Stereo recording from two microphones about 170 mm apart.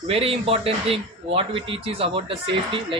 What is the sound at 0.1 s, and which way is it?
Speech, 35° right (ahead or behind).